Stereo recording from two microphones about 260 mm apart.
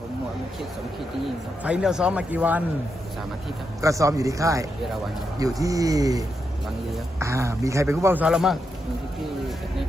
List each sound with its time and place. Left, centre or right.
1.6 s a man's voice: centre
3.8 s speech: centre